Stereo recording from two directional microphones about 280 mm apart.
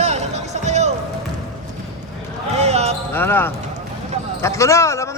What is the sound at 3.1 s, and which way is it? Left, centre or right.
Speech, centre.